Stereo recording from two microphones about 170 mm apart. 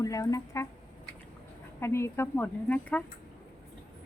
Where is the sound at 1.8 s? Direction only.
15° left (ahead or behind).